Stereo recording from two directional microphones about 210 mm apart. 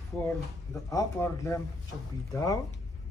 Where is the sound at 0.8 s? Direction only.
15° left (ahead or behind).